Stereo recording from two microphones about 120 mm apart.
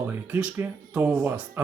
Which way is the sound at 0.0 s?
15° right (ahead or behind).